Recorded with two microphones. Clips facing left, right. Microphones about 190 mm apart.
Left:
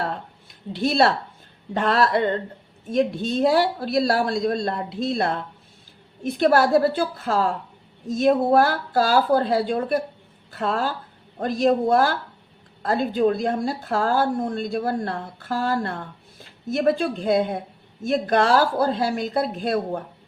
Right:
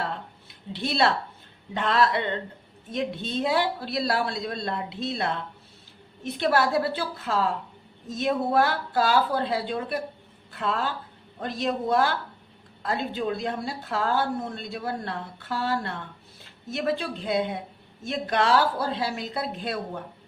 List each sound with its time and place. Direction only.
0.7 s speech: 45° left (ahead or behind)